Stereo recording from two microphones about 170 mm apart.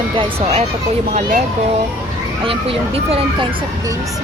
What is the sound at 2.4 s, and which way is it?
Speech, 35° right (ahead or behind).